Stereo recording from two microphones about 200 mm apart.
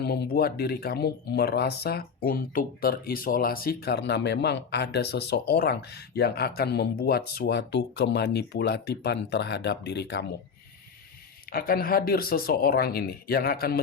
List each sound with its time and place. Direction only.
0.0 s speech: 55° left (ahead or behind)
11.5 s speech: 45° left (ahead or behind)